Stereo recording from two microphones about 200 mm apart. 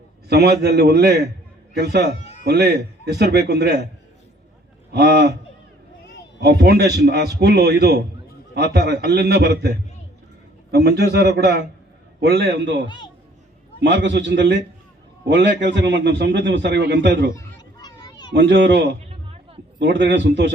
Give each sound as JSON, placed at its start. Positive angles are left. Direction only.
{"t": 0.3, "sound": "a man's voice", "side_deg": -55}
{"t": 4.9, "sound": "speech", "side_deg": -55}
{"t": 6.4, "sound": "a man's voice", "side_deg": -55}
{"t": 17.3, "sound": "a sound", "side_deg": 20}
{"t": 18.3, "sound": "a man's voice", "side_deg": -60}